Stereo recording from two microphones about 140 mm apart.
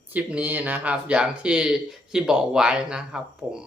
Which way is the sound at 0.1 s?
10° right (ahead or behind).